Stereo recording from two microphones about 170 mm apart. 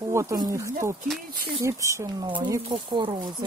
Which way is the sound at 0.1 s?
15° right (ahead or behind).